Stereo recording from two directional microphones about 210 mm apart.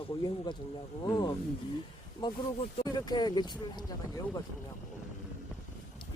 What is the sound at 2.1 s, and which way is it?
Speech, 25° left (ahead or behind).